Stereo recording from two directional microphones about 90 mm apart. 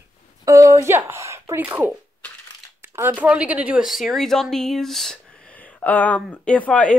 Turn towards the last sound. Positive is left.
turn(degrees=15)  # may be behind; listen again after turning